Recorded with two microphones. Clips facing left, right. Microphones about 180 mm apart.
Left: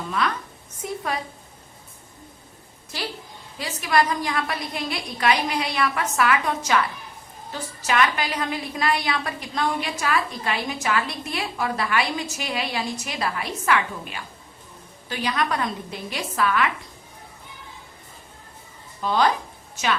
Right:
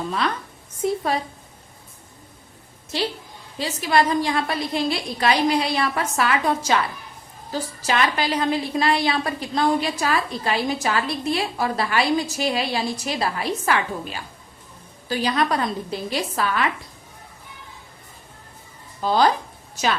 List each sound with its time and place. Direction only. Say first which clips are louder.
2.9 s a woman's voice: right 6 dB; 25° right (ahead or behind)
19.0 s a woman's voice: right 2 dB; 35° right (ahead or behind)